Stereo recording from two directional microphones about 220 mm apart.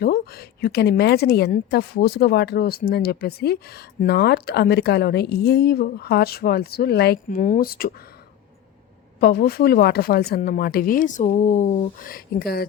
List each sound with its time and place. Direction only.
0.0 s a woman's voice: 45° left (ahead or behind)
9.2 s a woman's voice: 45° left (ahead or behind)